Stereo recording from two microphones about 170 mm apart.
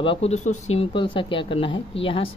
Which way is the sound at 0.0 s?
35° left (ahead or behind).